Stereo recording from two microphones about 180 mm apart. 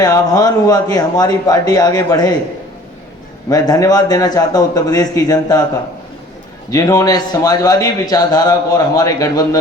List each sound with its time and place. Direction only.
0.0 s a man's voice: 20° left (ahead or behind)
3.5 s a man's voice: 20° left (ahead or behind)
6.7 s a man's voice: 20° left (ahead or behind)